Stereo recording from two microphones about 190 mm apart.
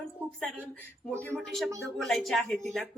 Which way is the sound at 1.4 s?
Centre (ahead or behind).